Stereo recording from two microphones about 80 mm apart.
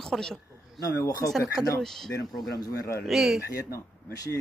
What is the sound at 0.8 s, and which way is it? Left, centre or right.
Speech, left.